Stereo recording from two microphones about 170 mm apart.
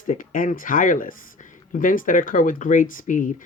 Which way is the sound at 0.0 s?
50° left (ahead or behind).